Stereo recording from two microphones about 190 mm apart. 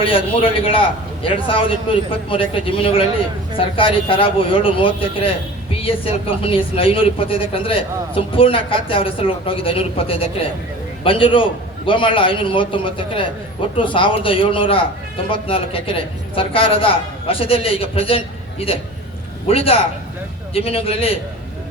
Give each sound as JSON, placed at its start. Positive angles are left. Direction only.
{"t": 0.0, "sound": "speech", "side_deg": 30}
{"t": 19.5, "sound": "a man's voice", "side_deg": 30}